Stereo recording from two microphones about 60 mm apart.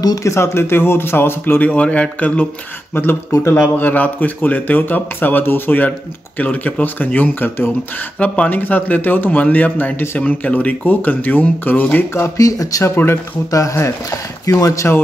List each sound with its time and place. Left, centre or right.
0.0 s speech: left
0.3 s speech: left
2.9 s a man's voice: left
12.4 s speech: left
12.9 s speech: left
13.5 s speech: left
14.4 s speech: left